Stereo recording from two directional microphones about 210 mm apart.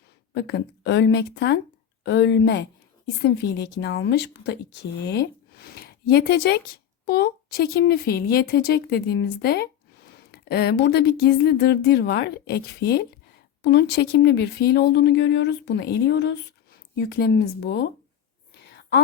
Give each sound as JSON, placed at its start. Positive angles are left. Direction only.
{"t": 0.3, "sound": "speech", "side_deg": 50}
{"t": 3.8, "sound": "speech", "side_deg": 55}